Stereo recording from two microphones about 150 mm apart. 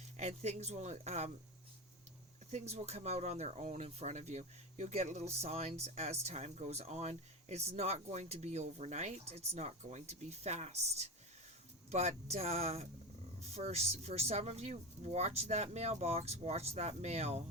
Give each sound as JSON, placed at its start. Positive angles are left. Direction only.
{"t": 0.2, "sound": "speech", "side_deg": -45}
{"t": 2.5, "sound": "speech", "side_deg": -45}